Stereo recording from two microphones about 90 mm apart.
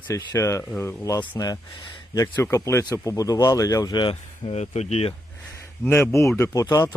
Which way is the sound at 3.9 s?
75° left (ahead or behind).